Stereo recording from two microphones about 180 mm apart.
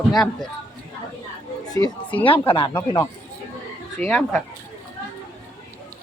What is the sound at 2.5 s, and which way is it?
Speech, 30° left (ahead or behind).